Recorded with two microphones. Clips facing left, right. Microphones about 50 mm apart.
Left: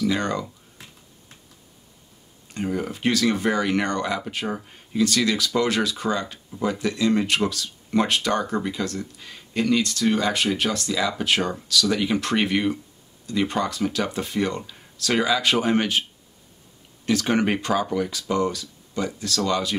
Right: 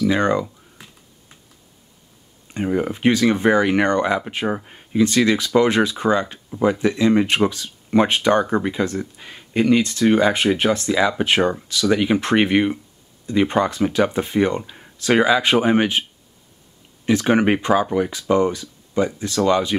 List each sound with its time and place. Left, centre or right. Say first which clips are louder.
0.0 s speech: right 6 dB; right
2.5 s speech: right 5 dB; right